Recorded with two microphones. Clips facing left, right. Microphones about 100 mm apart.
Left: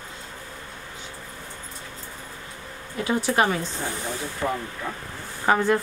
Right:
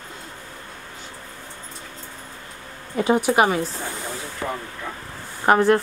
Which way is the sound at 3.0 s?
25° right (ahead or behind).